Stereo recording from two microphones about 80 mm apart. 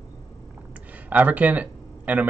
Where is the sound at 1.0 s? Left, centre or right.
Centre.